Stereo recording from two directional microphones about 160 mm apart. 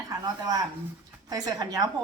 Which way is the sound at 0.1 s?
25° right (ahead or behind).